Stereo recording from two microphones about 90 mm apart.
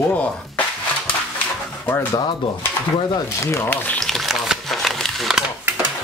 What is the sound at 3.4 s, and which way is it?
Speech, 30° left (ahead or behind).